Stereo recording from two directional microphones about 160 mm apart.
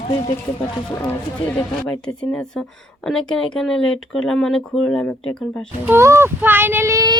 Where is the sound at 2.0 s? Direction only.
5° left (ahead or behind).